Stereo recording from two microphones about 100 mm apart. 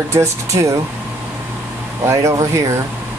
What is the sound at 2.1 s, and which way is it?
Speech, 30° right (ahead or behind).